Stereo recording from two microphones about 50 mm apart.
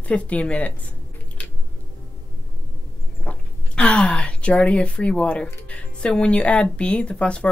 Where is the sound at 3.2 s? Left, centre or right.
Left.